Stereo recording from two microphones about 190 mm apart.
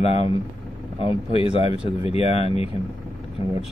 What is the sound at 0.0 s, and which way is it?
Speech, 30° left (ahead or behind).